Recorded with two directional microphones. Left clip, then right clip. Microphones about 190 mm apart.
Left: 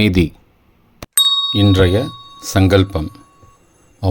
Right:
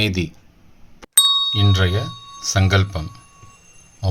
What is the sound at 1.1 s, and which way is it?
Ding, centre (ahead or behind).